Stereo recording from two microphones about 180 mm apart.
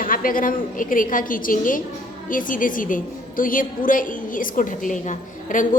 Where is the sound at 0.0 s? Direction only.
50° left (ahead or behind).